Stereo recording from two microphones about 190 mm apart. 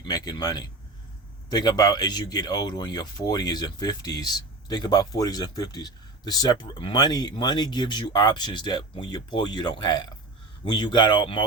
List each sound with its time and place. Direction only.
0.0 s speech: 20° left (ahead or behind)